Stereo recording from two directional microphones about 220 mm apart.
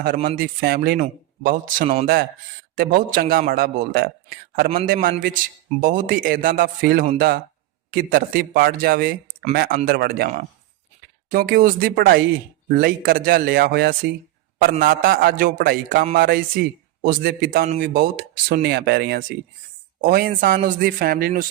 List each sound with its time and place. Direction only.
0.0 s a man's voice: 40° right (ahead or behind)